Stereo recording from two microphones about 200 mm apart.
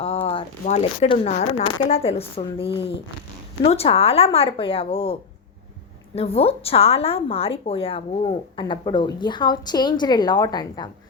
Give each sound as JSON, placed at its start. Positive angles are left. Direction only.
{"t": 0.0, "sound": "a sound", "side_deg": 30}
{"t": 0.6, "sound": "a woman's voice", "side_deg": 30}
{"t": 6.1, "sound": "a woman's voice", "side_deg": 30}